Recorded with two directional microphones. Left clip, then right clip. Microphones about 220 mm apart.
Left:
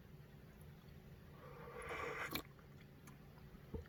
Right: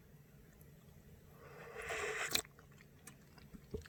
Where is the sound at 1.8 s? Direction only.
30° right (ahead or behind).